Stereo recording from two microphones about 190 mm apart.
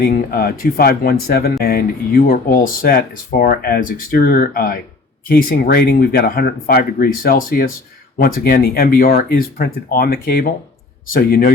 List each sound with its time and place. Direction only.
0.0 s speech: 55° left (ahead or behind)